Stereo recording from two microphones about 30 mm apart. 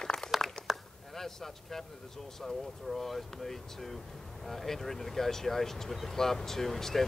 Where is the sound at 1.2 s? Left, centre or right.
Centre.